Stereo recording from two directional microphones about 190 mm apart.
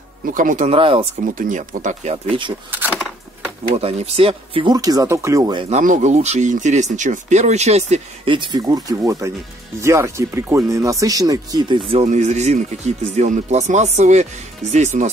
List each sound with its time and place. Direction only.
0.3 s speech: 45° right (ahead or behind)
0.7 s speech: 30° right (ahead or behind)
1.2 s speech: 45° right (ahead or behind)
3.7 s speech: 30° right (ahead or behind)
5.7 s speech: 40° right (ahead or behind); by 11.8 s 20° right (ahead or behind)
11.9 s speech: 35° right (ahead or behind)